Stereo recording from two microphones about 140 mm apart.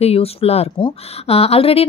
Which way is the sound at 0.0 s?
45° left (ahead or behind).